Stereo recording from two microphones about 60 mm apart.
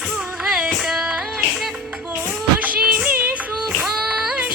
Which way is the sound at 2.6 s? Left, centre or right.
Right.